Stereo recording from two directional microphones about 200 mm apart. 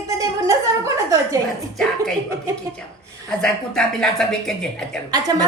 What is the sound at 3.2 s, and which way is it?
A woman's voice, 5° left (ahead or behind).